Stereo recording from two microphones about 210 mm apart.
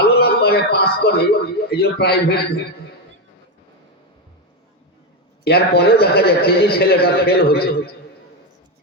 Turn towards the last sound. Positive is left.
turn(degrees=50)  # may be behind; listen again after turning